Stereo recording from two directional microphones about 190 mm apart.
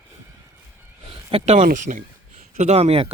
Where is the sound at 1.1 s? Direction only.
30° right (ahead or behind).